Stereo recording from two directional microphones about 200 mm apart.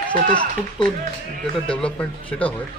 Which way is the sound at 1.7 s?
5° left (ahead or behind).